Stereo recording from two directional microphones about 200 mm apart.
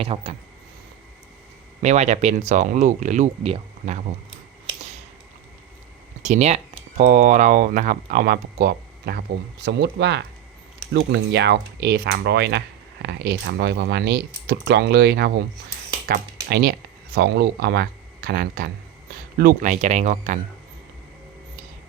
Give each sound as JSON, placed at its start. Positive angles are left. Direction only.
{"t": 0.0, "sound": "speech", "side_deg": -30}
{"t": 1.8, "sound": "speech", "side_deg": -35}
{"t": 4.6, "sound": "finger snapping", "side_deg": -35}
{"t": 6.2, "sound": "speech", "side_deg": -35}